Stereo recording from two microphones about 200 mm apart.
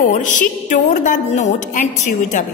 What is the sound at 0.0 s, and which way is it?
A woman's voice, 40° left (ahead or behind).